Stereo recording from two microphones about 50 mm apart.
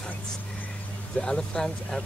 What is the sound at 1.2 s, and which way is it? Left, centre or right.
Speech, centre.